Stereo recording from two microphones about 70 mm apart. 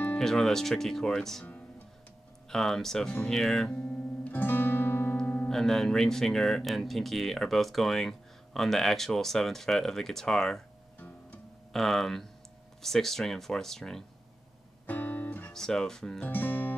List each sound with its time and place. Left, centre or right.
0.2 s speech: centre
2.5 s speech: centre
3.7 s guitar: left
5.2 s music: left
5.5 s speech: centre
11.7 s speech: centre
14.9 s music: left
15.5 s speech: centre
16.3 s music: left